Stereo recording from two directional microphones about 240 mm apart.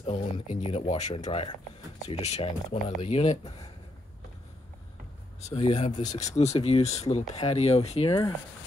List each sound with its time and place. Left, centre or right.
0.0 s speech: left
5.5 s speech: left